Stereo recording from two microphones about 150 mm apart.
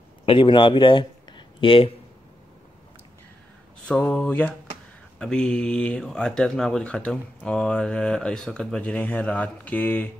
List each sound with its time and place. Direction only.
0.2 s speech: 35° left (ahead or behind)
3.8 s speech: 10° left (ahead or behind)